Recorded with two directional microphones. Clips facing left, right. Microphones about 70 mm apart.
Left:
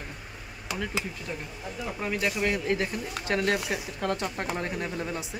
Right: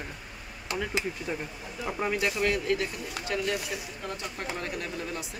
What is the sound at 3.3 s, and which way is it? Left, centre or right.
Speech, left.